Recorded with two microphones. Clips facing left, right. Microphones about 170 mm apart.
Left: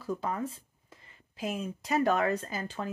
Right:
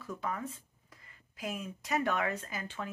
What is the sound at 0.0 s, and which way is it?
Speech, 35° left (ahead or behind).